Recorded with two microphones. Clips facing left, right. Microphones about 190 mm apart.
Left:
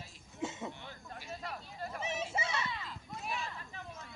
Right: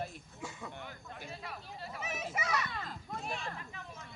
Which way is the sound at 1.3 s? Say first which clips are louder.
Left 6 dB; 45° left (ahead or behind).